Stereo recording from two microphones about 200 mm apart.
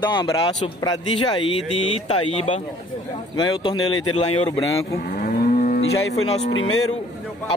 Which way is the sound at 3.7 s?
90° left.